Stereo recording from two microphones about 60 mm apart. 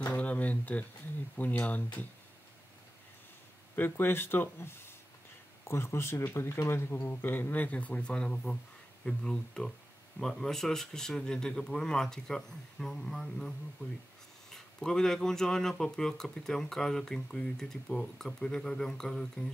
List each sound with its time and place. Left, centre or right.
0.1 s a sound: left
1.3 s speech: left
3.7 s speech: left; by 19.5 s centre